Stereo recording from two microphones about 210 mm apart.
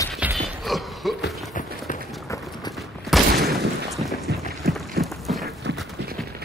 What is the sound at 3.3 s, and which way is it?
Fusillade, 50° right (ahead or behind).